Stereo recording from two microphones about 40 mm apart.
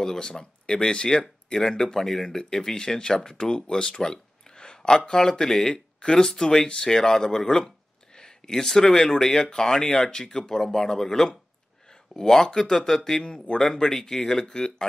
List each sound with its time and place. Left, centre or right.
0.0 s speech: centre
11.9 s a sound: centre
12.5 s speech: centre